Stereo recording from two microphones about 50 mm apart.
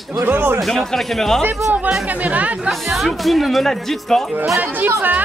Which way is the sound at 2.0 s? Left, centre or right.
Right.